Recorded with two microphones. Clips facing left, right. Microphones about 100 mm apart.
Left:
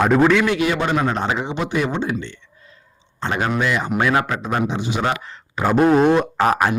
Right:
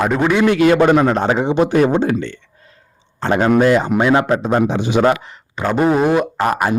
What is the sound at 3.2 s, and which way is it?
Speech, 40° right (ahead or behind).